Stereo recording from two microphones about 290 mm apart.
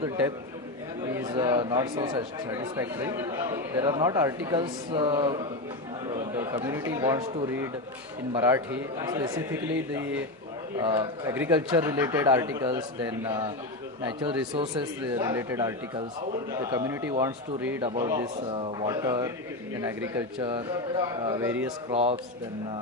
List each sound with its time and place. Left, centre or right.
1.1 s speech: centre
15.1 s speech: centre
21.8 s a man's voice: right